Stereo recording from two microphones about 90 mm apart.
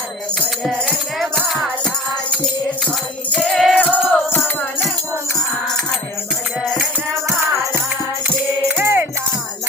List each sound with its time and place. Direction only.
0.6 s music: centre (ahead or behind)
3.3 s music: 5° left (ahead or behind)
3.8 s music: 20° left (ahead or behind)
8.6 s music: 25° right (ahead or behind)